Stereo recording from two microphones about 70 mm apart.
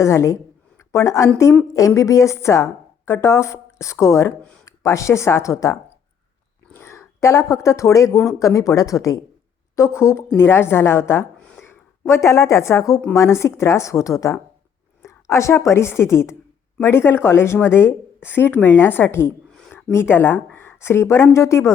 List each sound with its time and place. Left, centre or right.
0.0 s a woman's voice: left
6.7 s a woman's voice: left
9.7 s a woman's voice: left
11.3 s a sound: centre
11.6 s a woman's voice: left